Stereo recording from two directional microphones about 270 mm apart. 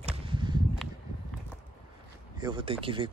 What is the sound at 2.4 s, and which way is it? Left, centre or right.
Speech, centre.